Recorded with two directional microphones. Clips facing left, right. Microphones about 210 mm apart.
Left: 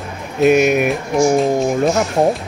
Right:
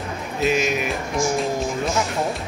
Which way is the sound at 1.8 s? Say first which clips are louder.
Left 8 dB; 45° left (ahead or behind).